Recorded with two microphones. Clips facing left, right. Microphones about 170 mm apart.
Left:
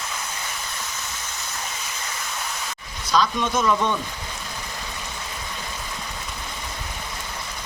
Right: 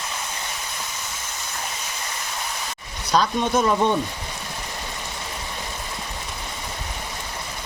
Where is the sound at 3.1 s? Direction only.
35° right (ahead or behind).